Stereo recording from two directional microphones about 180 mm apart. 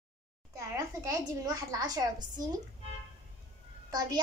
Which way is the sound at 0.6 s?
20° right (ahead or behind).